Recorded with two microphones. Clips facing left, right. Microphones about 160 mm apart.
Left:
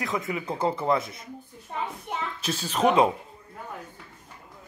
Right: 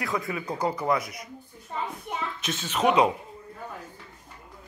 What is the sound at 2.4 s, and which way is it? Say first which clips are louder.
Speech: left 1 dB; 35° left (ahead or behind).